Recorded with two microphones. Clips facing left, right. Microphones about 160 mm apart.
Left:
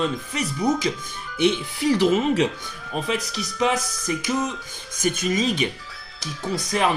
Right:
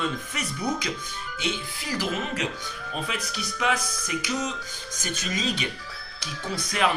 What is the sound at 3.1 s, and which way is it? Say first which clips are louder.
Speech: left 6 dB; 30° left (ahead or behind).